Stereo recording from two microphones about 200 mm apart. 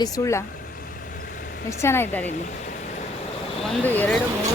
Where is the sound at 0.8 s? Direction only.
45° left (ahead or behind).